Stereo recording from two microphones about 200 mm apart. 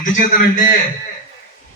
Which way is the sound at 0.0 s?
40° left (ahead or behind).